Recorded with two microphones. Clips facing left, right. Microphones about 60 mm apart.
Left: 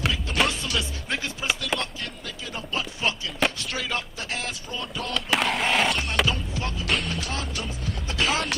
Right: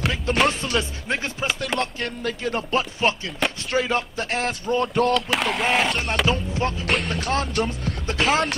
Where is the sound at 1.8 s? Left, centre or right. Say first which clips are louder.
Right 7 dB; right.